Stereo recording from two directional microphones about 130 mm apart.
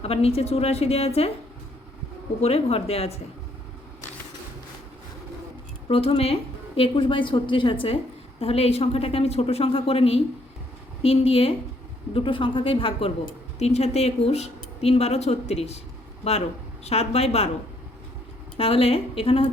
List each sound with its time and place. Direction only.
0.0 s speech: 50° left (ahead or behind)
2.4 s speech: 50° left (ahead or behind)
5.9 s speech: 50° left (ahead or behind)
13.6 s speech: 55° left (ahead or behind)
16.8 s speech: 55° left (ahead or behind)
18.5 s speech: 50° left (ahead or behind)